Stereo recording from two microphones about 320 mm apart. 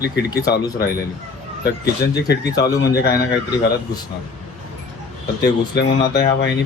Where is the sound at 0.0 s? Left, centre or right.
Left.